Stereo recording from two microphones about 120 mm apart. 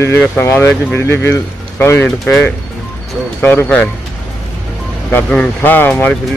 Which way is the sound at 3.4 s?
15° left (ahead or behind).